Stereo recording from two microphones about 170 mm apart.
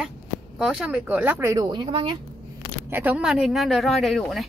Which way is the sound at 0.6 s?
5° right (ahead or behind).